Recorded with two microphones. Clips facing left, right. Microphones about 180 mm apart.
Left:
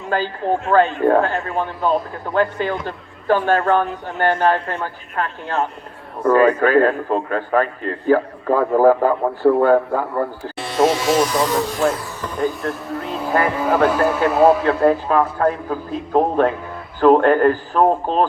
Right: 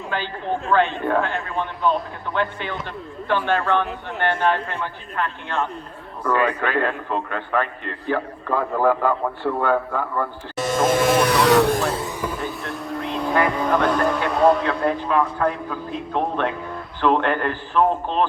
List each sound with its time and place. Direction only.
0.1 s a man's voice: 40° left (ahead or behind)
10.6 s electric shaver: 45° right (ahead or behind); by 11.8 s 70° right (ahead or behind)
12.5 s vehicle: centre (ahead or behind)
13.5 s speech: 5° left (ahead or behind)
14.7 s a man's voice: 40° left (ahead or behind)